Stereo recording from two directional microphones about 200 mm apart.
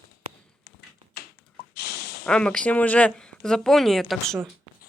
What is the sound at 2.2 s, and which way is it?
Speech, 5° left (ahead or behind).